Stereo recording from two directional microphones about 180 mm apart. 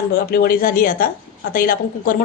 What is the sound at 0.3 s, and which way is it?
A woman's voice, 55° left (ahead or behind).